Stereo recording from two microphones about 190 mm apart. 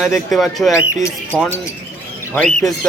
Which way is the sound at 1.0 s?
10° left (ahead or behind).